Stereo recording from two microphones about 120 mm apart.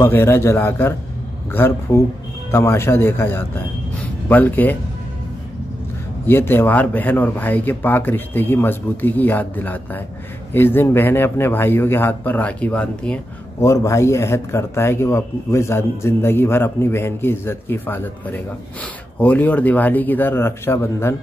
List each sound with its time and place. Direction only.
0.0 s speech: 20° left (ahead or behind)
6.2 s speech: 20° left (ahead or behind)
13.6 s speech: 25° left (ahead or behind)